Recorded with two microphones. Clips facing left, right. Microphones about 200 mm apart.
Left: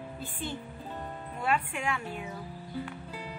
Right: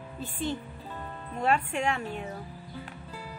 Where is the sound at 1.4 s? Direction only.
40° right (ahead or behind).